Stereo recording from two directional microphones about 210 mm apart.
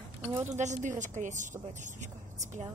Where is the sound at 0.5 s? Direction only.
35° right (ahead or behind).